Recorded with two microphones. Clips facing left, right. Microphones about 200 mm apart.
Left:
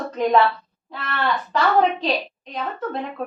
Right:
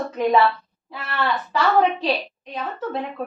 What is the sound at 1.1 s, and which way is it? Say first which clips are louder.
A woman's voice: even; 5° right (ahead or behind).